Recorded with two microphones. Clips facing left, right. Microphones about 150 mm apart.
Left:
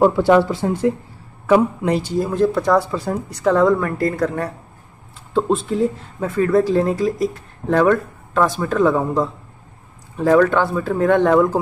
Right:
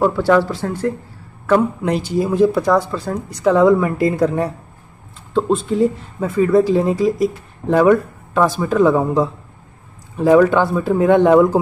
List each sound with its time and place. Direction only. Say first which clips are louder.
0.0 s speech: left 1 dB; 20° left (ahead or behind)
1.5 s speech: even; centre (ahead or behind); by 4.5 s 15° right (ahead or behind)
5.3 s speech: right 1 dB; centre (ahead or behind)